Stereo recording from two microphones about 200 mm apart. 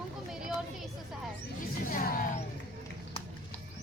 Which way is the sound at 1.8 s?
45° left (ahead or behind).